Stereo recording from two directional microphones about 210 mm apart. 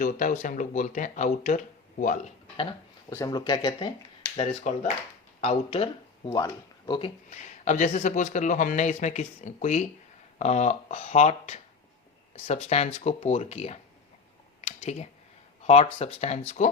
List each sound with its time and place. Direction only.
0.0 s speech: 40° left (ahead or behind)
3.1 s speech: 15° left (ahead or behind)
7.3 s speech: 35° left (ahead or behind)
15.6 s speech: 30° left (ahead or behind)